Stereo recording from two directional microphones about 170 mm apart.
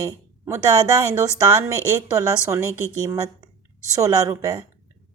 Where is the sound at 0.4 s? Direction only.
20° right (ahead or behind).